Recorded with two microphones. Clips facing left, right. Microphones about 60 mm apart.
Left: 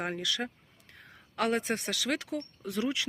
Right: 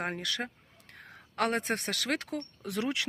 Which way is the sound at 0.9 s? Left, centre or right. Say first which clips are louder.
Right 1 dB; right.